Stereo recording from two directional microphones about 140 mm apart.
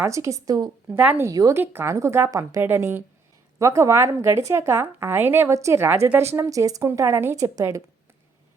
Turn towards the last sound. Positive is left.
turn(degrees=-20)  # may be behind; listen again after turning